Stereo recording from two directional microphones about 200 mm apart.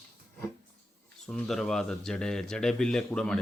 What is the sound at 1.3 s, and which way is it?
Speech, centre (ahead or behind).